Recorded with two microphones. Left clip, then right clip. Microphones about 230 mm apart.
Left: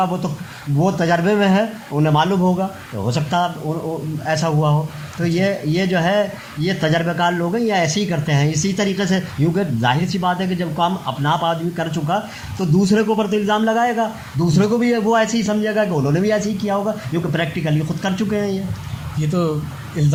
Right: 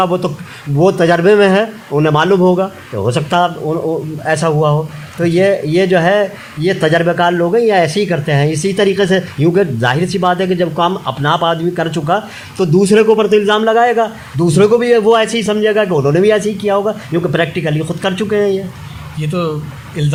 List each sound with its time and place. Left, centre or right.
0.0 s speech: right
19.3 s speech: centre